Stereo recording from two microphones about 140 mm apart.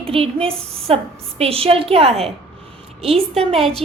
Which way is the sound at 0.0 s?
40° right (ahead or behind).